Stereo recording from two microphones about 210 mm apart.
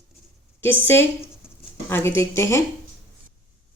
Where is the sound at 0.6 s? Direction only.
10° left (ahead or behind).